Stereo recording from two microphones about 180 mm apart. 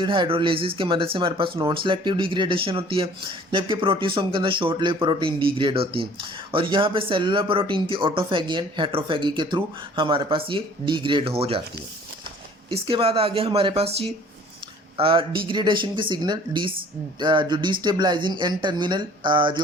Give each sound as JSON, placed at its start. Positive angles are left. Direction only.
{"t": 0.0, "sound": "speech", "side_deg": -25}
{"t": 12.7, "sound": "speech", "side_deg": -30}